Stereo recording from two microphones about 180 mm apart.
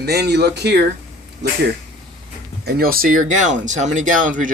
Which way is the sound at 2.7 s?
55° right (ahead or behind).